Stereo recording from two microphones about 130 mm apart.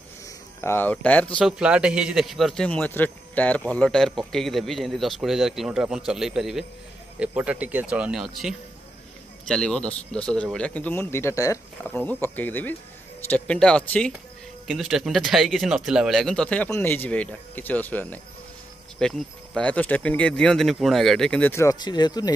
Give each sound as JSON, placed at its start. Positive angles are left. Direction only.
{"t": 0.6, "sound": "speech", "side_deg": 15}
{"t": 1.4, "sound": "a man's voice", "side_deg": -10}
{"t": 11.9, "sound": "a man's voice", "side_deg": 15}
{"t": 21.7, "sound": "speech", "side_deg": 35}